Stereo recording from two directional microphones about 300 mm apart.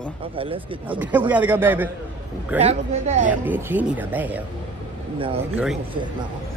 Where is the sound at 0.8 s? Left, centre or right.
Centre.